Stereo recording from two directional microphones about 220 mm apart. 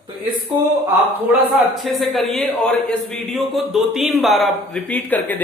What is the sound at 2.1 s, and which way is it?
Speech, centre (ahead or behind).